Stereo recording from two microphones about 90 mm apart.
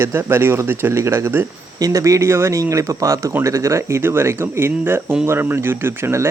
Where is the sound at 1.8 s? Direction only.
40° right (ahead or behind).